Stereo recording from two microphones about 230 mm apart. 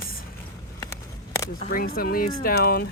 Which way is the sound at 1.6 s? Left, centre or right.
Left.